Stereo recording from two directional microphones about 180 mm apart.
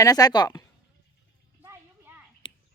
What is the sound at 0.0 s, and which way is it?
Speech, 20° left (ahead or behind).